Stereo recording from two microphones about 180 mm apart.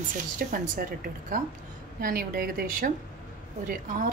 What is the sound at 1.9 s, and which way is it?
Speech, 55° right (ahead or behind).